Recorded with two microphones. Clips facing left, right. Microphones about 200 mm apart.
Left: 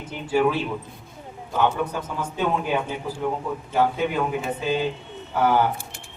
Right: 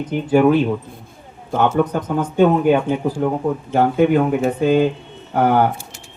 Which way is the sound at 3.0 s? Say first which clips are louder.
Right 8 dB; 60° right (ahead or behind).